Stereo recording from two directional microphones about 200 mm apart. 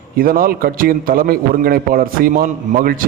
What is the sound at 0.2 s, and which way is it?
A man's voice, 45° right (ahead or behind).